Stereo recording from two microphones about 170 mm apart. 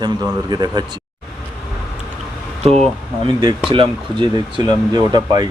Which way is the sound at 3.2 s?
25° right (ahead or behind).